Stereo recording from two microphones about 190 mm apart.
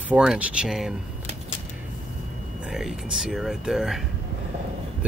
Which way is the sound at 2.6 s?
Centre (ahead or behind).